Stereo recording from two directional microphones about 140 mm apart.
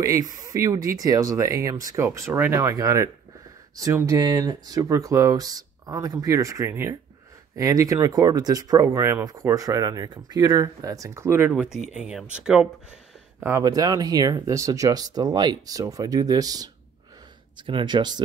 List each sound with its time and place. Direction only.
0.0 s speech: 25° right (ahead or behind)
11.5 s speech: 5° right (ahead or behind)
13.4 s speech: 20° right (ahead or behind)